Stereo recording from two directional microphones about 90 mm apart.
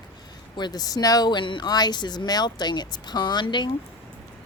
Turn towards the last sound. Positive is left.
turn(degrees=55)  # may be behind; listen again after turning